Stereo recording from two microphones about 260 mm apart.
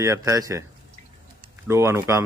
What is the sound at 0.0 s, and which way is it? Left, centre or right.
Speech, centre.